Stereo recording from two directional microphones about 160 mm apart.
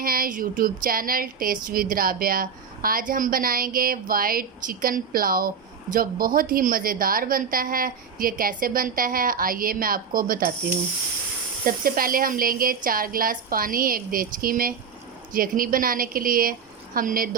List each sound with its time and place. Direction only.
0.0 s a woman's voice: 65° right (ahead or behind)
11.6 s a woman's voice: 65° right (ahead or behind)